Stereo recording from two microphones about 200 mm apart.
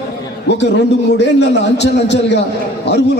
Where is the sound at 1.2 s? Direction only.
60° left (ahead or behind).